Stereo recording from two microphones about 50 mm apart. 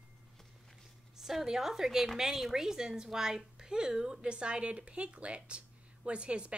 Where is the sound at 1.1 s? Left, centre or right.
Centre.